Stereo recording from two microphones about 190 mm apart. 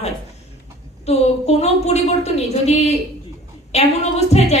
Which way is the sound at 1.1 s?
35° left (ahead or behind).